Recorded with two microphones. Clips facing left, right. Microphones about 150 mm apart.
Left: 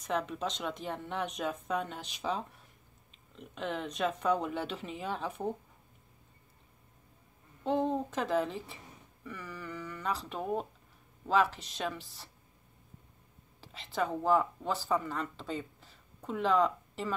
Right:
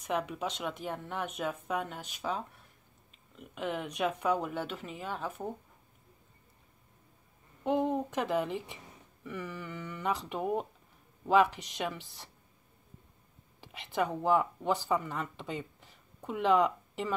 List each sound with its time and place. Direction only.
0.0 s speech: 10° right (ahead or behind)
7.6 s a woman's voice: 15° right (ahead or behind)
13.6 s speech: 15° right (ahead or behind)